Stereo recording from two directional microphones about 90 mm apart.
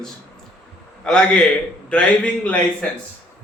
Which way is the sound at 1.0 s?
10° left (ahead or behind).